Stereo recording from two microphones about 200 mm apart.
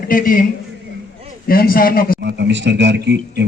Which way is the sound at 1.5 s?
45° left (ahead or behind).